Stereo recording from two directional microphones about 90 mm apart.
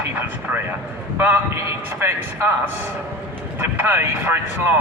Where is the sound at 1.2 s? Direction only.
30° right (ahead or behind).